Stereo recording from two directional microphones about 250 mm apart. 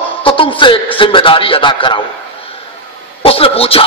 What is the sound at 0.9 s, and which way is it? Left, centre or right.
A man's voice, left.